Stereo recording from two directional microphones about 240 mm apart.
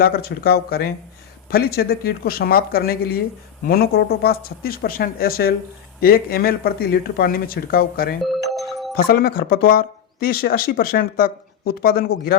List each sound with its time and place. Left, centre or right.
0.0 s speech: left
8.2 s doorbell: centre
9.0 s speech: left